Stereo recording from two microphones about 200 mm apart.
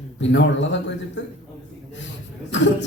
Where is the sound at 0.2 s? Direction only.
65° left (ahead or behind).